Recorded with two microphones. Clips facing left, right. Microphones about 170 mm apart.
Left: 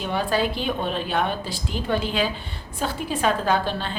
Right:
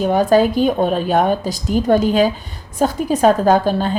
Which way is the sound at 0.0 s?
45° right (ahead or behind).